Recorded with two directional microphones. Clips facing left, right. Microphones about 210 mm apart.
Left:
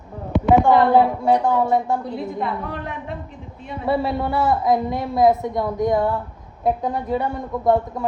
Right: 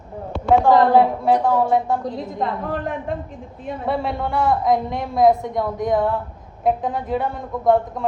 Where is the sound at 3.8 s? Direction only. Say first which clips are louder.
Left 3 dB; centre (ahead or behind).